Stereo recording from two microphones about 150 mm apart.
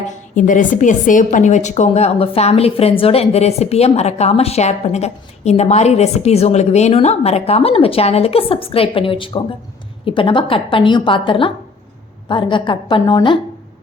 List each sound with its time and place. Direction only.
0.1 s a woman's voice: 60° left (ahead or behind); by 13.4 s 30° left (ahead or behind)